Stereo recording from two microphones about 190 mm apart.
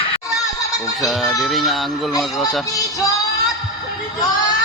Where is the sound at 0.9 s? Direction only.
Centre (ahead or behind).